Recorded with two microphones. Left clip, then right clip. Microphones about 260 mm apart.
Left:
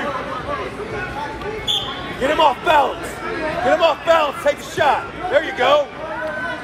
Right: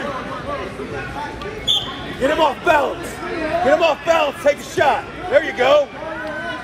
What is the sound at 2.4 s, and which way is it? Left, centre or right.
A man's voice, right.